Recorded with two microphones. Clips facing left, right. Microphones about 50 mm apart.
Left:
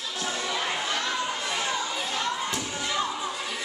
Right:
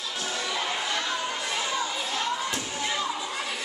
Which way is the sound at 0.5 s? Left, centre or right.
Centre.